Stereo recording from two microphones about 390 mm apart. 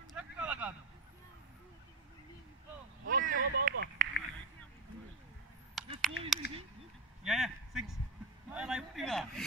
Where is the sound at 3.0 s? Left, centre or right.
Right.